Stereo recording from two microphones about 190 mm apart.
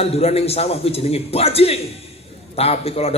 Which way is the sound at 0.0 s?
30° left (ahead or behind).